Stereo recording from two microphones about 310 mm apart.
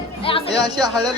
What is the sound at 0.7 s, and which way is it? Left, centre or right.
Speech, centre.